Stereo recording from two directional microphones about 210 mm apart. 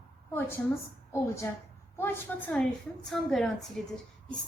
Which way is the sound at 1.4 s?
10° left (ahead or behind).